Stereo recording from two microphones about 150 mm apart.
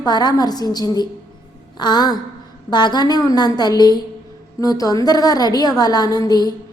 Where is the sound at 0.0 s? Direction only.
25° left (ahead or behind).